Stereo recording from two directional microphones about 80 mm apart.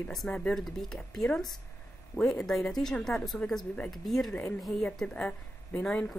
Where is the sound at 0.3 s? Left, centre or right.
Centre.